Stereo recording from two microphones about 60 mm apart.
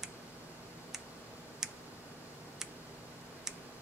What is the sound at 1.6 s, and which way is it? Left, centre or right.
Tick, centre.